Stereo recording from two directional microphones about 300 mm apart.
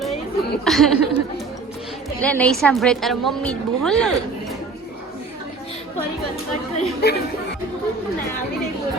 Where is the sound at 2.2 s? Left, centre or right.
Centre.